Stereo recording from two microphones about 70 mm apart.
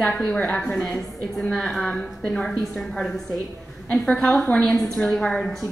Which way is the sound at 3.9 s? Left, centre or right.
Centre.